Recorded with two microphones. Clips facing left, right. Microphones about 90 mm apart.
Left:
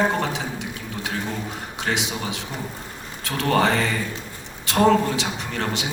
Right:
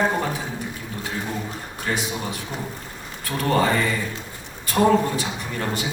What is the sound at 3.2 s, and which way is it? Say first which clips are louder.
Speech: even; 75° left (ahead or behind).